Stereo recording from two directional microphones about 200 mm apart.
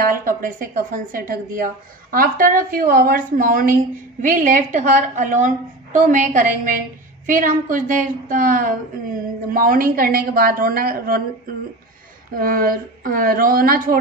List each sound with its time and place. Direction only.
0.0 s a woman's voice: 45° right (ahead or behind)
12.4 s speech: 45° right (ahead or behind)